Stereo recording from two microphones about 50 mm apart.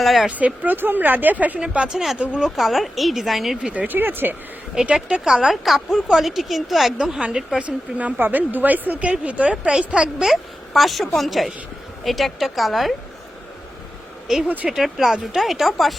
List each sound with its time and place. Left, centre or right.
0.0 s a woman's voice: centre
0.3 s speech: right
1.5 s a woman's voice: right
2.6 s a woman's voice: centre
3.7 s a woman's voice: right
3.9 s speech: right
4.7 s speech: centre
7.0 s a woman's voice: centre; by 9.0 s right
9.2 s a woman's voice: right
10.2 s a woman's voice: centre
14.4 s a woman's voice: right
14.7 s a woman's voice: centre